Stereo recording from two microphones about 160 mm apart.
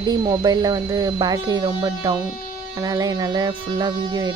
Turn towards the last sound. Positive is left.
turn(degrees=-25)  # may be behind; listen again after turning